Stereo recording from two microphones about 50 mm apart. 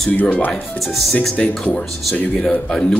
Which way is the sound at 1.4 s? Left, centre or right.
Centre.